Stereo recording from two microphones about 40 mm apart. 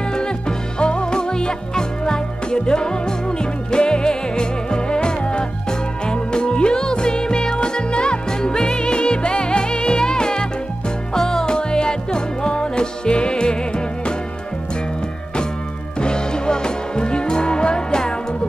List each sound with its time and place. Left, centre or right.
0.1 s music: left
16.0 s music: left